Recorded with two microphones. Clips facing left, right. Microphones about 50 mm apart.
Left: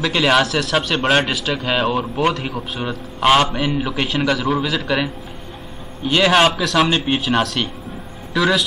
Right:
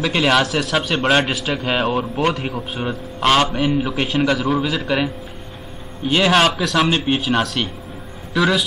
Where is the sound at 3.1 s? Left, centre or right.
Centre.